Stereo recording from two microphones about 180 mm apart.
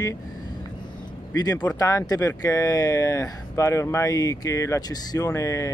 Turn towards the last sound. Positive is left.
turn(degrees=15)  # may be behind; listen again after turning